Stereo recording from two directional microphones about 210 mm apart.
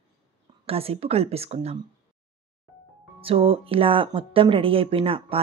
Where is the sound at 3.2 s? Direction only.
25° right (ahead or behind).